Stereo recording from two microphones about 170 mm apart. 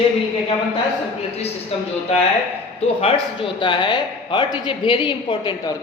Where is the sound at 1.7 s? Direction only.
35° left (ahead or behind).